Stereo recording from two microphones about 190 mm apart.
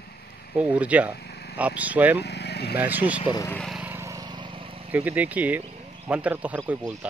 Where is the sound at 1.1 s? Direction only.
60° left (ahead or behind).